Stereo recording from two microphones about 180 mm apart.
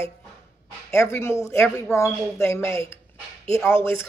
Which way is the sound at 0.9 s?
15° left (ahead or behind).